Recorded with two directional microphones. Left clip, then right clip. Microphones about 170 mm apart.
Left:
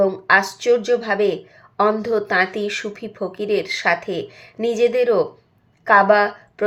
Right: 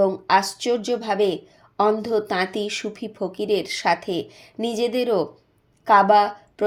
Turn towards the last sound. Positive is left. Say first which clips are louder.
# left 1 dB
turn(degrees=-40)  # may be behind; listen again after turning